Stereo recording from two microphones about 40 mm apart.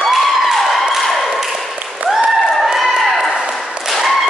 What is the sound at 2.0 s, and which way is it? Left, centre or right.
Applause, right.